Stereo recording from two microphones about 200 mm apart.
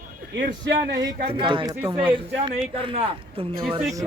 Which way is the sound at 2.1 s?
25° right (ahead or behind).